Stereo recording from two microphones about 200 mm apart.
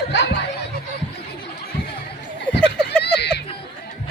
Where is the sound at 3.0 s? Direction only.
55° left (ahead or behind).